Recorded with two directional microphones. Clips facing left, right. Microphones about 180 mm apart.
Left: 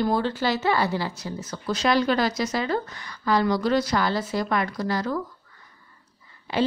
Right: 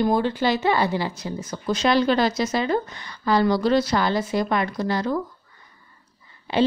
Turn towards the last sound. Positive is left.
turn(degrees=-25)  # may be behind; listen again after turning